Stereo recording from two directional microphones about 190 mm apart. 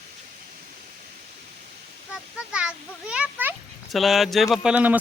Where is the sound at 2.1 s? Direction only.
5° right (ahead or behind).